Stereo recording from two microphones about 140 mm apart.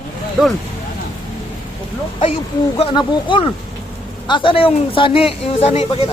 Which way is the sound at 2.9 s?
35° left (ahead or behind).